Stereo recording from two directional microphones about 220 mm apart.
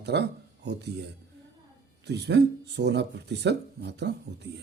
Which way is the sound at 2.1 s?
50° right (ahead or behind).